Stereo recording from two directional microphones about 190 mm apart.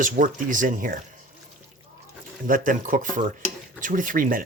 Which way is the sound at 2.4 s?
45° right (ahead or behind).